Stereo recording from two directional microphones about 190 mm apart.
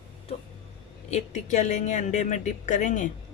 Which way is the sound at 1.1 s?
40° left (ahead or behind).